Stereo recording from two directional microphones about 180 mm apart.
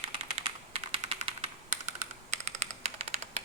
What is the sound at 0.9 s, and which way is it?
Typing, 35° right (ahead or behind).